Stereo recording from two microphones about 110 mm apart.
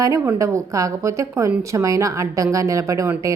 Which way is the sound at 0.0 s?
30° right (ahead or behind).